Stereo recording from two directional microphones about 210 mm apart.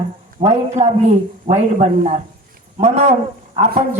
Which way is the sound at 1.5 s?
20° right (ahead or behind).